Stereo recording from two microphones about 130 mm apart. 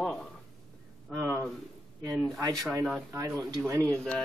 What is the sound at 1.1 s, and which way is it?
A man's voice, 15° right (ahead or behind).